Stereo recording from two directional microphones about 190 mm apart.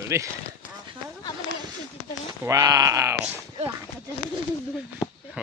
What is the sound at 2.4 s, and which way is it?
Speech, 15° right (ahead or behind).